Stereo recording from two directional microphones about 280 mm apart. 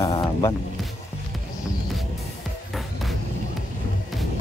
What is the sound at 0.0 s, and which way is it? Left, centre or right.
Music, centre.